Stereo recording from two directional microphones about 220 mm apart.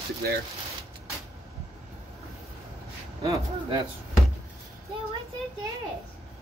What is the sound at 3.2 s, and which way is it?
Speech, 20° right (ahead or behind).